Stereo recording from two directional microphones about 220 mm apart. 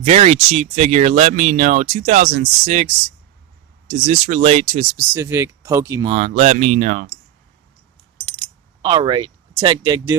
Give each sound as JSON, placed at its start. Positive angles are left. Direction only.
{"t": 0.0, "sound": "speech", "side_deg": -30}
{"t": 4.0, "sound": "speech", "side_deg": -30}
{"t": 5.1, "sound": "speech", "side_deg": -10}
{"t": 6.1, "sound": "speech", "side_deg": -30}
{"t": 8.8, "sound": "speech", "side_deg": -20}